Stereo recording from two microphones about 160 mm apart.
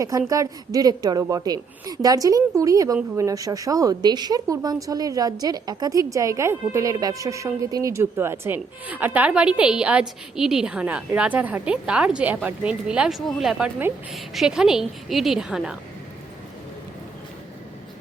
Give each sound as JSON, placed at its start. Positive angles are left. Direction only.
{"t": 0.0, "sound": "a woman's voice", "side_deg": -20}